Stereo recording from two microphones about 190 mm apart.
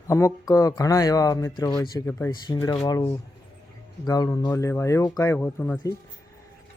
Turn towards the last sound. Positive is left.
turn(degrees=10)  # may be behind; listen again after turning